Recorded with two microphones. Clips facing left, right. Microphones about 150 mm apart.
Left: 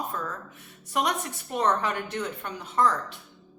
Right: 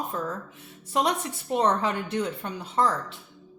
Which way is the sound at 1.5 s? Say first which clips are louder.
Right 2 dB; 25° right (ahead or behind).